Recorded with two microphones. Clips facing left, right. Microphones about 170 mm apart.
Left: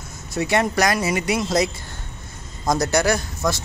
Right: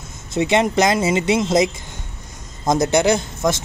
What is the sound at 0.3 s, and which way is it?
A man's voice, 20° right (ahead or behind).